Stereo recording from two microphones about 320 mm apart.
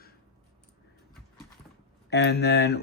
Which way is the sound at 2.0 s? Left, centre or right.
Left.